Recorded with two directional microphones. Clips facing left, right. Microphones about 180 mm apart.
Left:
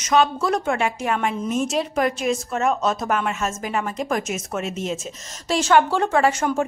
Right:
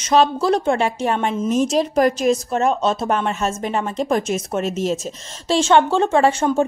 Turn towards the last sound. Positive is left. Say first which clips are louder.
# right 3 dB
turn(degrees=-30)  # may be behind; listen again after turning